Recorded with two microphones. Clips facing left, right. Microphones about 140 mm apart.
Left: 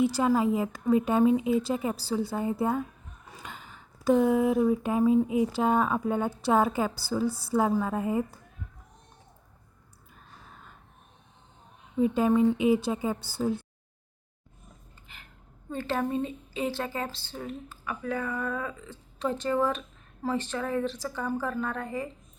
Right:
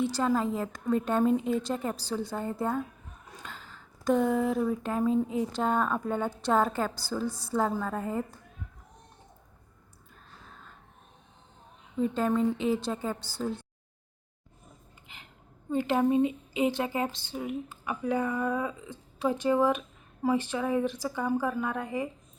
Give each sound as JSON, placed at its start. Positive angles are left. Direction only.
{"t": 0.0, "sound": "speech", "side_deg": 10}
{"t": 11.9, "sound": "speech", "side_deg": 10}
{"t": 15.0, "sound": "a sound", "side_deg": -20}
{"t": 15.7, "sound": "a woman's voice", "side_deg": -15}